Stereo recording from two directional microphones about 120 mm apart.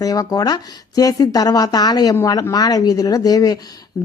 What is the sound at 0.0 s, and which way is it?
Speech, 30° left (ahead or behind).